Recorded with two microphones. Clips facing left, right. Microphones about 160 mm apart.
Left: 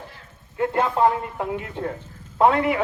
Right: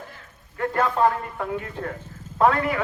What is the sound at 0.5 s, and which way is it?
A man's voice, 20° left (ahead or behind).